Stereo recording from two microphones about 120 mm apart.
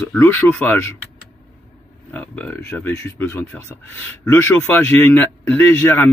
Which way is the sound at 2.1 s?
15° left (ahead or behind).